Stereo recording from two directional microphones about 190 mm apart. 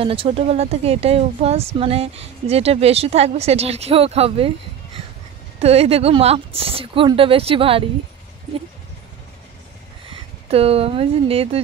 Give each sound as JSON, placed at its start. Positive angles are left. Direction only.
{"t": 0.0, "sound": "speech", "side_deg": -30}
{"t": 5.6, "sound": "speech", "side_deg": -35}
{"t": 10.5, "sound": "speech", "side_deg": -30}